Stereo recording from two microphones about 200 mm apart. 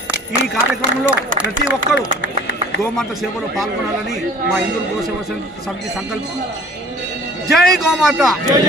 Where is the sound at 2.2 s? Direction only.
60° left (ahead or behind).